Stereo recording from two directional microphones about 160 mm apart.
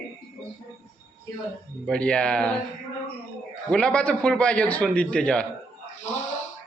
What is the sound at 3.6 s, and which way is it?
A man's voice, 5° left (ahead or behind).